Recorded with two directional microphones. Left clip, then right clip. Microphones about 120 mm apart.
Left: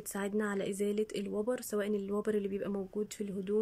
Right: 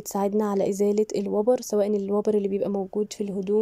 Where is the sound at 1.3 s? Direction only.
25° right (ahead or behind).